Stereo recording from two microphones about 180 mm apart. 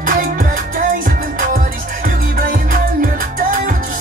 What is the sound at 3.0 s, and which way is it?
Music, 50° right (ahead or behind).